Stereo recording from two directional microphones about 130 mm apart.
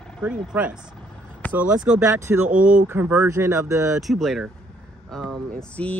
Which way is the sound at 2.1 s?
20° right (ahead or behind).